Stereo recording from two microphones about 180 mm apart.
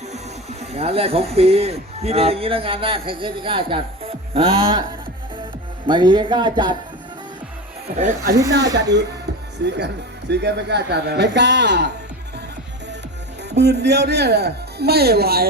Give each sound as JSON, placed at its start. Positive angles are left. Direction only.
{"t": 0.6, "sound": "speech", "side_deg": -35}
{"t": 8.4, "sound": "speech", "side_deg": -70}
{"t": 13.6, "sound": "speech", "side_deg": -65}